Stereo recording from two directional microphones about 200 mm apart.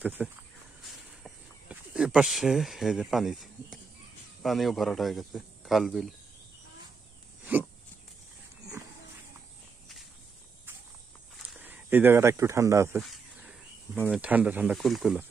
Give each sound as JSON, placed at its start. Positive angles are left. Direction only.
{"t": 0.0, "sound": "speech", "side_deg": -5}
{"t": 1.7, "sound": "speech", "side_deg": -5}
{"t": 7.5, "sound": "speech", "side_deg": -10}
{"t": 11.5, "sound": "speech", "side_deg": -10}
{"t": 13.0, "sound": "a sound", "side_deg": 0}
{"t": 13.9, "sound": "speech", "side_deg": 5}
{"t": 14.2, "sound": "speech", "side_deg": -10}